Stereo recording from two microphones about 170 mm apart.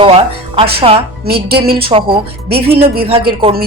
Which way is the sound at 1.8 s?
30° right (ahead or behind).